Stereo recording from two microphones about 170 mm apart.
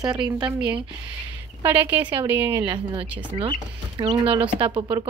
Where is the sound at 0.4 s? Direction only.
5° right (ahead or behind).